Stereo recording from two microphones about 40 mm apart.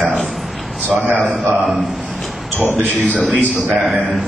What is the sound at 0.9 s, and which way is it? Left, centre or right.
Speech, right.